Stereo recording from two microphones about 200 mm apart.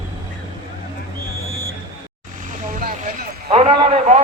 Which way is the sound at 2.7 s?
40° right (ahead or behind).